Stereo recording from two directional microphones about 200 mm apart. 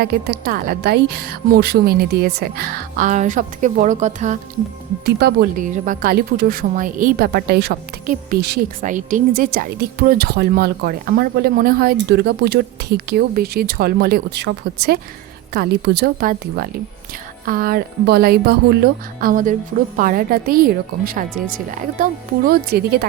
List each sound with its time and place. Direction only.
0.0 s speech: 50° right (ahead or behind)
5.0 s speech: 50° right (ahead or behind)